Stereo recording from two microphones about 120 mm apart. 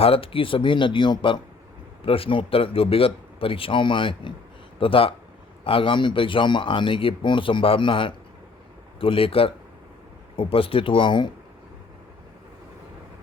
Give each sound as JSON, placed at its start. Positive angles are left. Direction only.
{"t": 0.0, "sound": "speech", "side_deg": 50}